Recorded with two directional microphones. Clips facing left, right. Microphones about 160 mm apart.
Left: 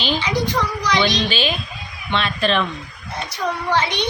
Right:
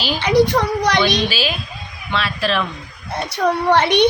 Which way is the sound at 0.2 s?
65° right (ahead or behind).